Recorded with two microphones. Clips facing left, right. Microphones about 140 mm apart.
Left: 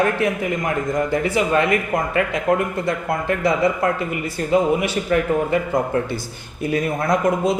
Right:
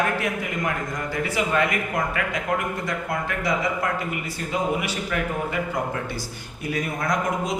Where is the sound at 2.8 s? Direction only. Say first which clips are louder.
Left 6 dB; 25° left (ahead or behind).